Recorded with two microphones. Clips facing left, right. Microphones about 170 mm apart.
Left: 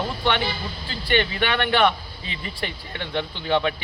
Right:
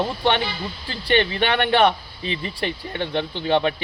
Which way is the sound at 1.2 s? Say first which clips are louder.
Right 3 dB; 25° right (ahead or behind).